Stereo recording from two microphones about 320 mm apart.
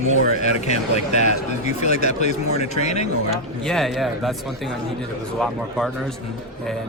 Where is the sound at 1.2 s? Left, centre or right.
Left.